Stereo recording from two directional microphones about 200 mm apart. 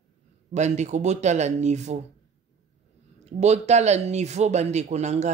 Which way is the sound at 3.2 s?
35° right (ahead or behind).